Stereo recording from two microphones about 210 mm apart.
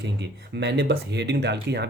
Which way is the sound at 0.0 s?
55° right (ahead or behind).